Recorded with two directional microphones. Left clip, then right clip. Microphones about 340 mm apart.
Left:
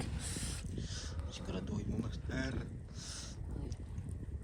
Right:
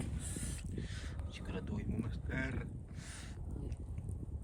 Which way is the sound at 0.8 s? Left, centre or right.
Centre.